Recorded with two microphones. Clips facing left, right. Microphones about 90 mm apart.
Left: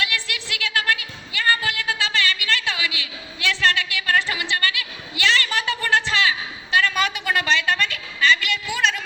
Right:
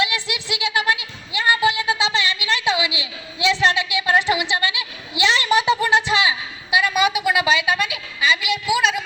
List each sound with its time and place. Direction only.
0.0 s music: 20° right (ahead or behind)